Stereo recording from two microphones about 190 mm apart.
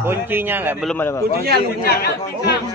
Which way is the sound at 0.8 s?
5° left (ahead or behind).